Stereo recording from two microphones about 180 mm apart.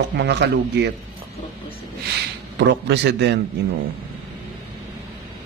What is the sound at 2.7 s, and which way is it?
Speech, 70° right (ahead or behind).